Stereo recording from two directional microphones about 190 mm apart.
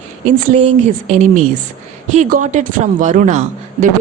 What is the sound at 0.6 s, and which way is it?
A woman's voice, 35° right (ahead or behind).